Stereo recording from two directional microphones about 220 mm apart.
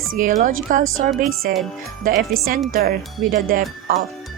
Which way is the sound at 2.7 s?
40° right (ahead or behind).